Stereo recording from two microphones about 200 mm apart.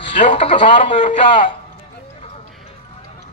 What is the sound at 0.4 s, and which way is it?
A man's voice, 25° left (ahead or behind).